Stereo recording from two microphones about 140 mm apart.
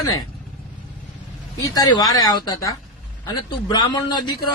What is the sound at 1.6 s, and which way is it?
A man's voice, 25° left (ahead or behind).